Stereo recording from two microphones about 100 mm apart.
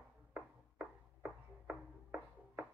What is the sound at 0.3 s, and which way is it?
Music, 15° right (ahead or behind).